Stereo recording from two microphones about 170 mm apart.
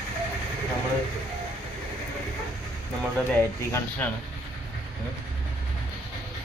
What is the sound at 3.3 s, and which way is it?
Speech, 10° left (ahead or behind).